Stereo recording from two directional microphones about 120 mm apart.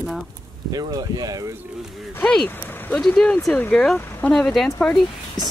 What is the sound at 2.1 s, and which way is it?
Speech, 10° left (ahead or behind).